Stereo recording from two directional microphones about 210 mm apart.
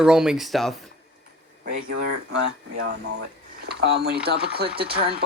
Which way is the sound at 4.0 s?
50° right (ahead or behind).